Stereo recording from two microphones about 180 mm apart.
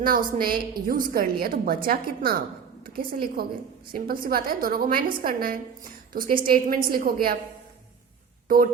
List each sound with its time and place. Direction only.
0.0 s a woman's voice: 50° right (ahead or behind)